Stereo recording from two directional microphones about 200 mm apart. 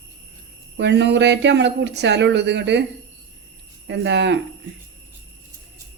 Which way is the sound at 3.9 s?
60° right (ahead or behind).